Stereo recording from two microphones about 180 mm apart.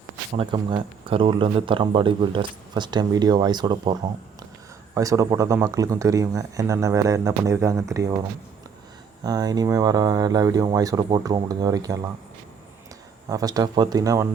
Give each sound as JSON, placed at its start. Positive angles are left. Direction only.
{"t": 0.3, "sound": "speech", "side_deg": -25}
{"t": 4.9, "sound": "speech", "side_deg": -20}
{"t": 9.2, "sound": "speech", "side_deg": -20}
{"t": 13.2, "sound": "speech", "side_deg": -20}